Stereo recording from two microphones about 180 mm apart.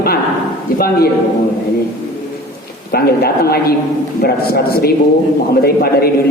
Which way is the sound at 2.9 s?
60° left (ahead or behind).